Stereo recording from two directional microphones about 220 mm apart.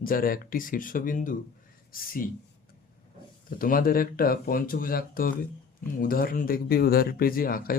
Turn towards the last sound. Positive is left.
turn(degrees=40)  # may be behind; listen again after turning